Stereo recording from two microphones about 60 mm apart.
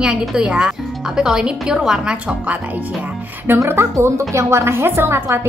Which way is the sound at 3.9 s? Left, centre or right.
Right.